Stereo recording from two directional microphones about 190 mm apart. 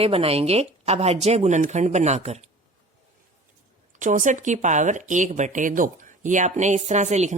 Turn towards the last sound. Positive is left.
turn(degrees=-40)  # may be behind; listen again after turning